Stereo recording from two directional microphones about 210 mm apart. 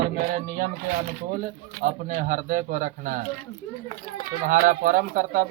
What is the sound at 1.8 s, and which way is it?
Speech, 35° right (ahead or behind).